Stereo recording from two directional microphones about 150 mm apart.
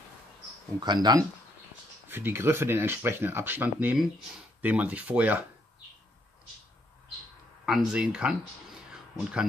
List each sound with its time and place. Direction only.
0.7 s speech: 30° right (ahead or behind)
2.0 s speech: 15° right (ahead or behind)
7.6 s speech: 5° right (ahead or behind)